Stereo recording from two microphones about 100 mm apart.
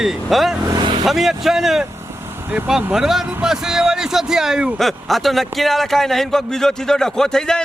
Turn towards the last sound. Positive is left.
turn(degrees=5)  # may be behind; listen again after turning